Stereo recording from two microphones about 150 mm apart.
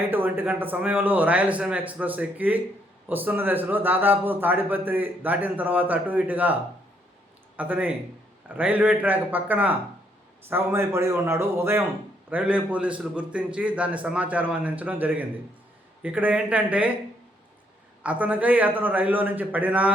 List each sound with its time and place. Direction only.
0.1 s a man's voice: 15° right (ahead or behind)
18.0 s a man's voice: 10° right (ahead or behind)